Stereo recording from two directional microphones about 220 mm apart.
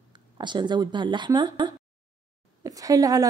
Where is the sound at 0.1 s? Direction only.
20° right (ahead or behind).